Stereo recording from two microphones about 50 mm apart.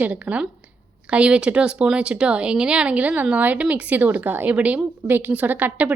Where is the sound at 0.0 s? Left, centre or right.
Right.